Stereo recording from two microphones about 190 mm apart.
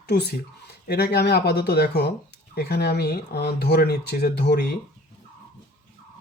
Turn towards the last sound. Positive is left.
turn(degrees=55)  # may be behind; listen again after turning